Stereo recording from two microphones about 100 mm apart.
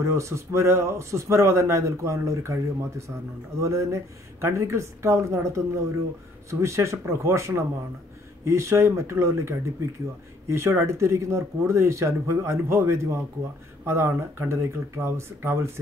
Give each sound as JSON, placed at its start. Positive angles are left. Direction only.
{"t": 0.0, "sound": "a man's voice", "side_deg": -30}